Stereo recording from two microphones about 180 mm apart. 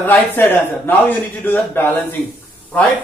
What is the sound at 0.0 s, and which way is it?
A man's voice, 10° left (ahead or behind).